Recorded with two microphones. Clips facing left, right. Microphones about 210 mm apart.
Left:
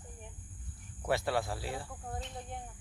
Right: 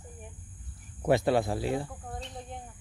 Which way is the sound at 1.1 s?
20° right (ahead or behind).